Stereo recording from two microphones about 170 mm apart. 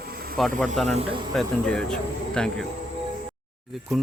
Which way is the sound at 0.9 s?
35° right (ahead or behind).